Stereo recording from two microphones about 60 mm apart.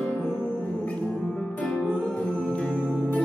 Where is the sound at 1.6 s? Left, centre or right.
Left.